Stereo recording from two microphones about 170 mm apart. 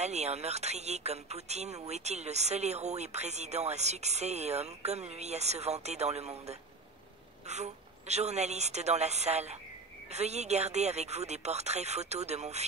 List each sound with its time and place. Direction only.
0.0 s speech: 40° right (ahead or behind)